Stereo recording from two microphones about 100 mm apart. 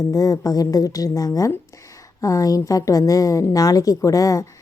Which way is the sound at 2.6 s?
35° left (ahead or behind).